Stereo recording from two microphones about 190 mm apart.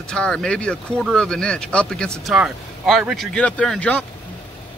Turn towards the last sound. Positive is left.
turn(degrees=5)  # may be behind; listen again after turning